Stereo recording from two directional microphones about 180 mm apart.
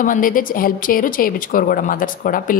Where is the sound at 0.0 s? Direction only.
50° left (ahead or behind).